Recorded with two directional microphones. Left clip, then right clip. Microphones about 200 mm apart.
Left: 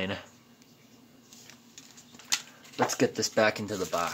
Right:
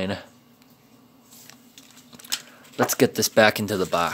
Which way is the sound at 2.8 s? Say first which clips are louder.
Right 6 dB; 45° right (ahead or behind).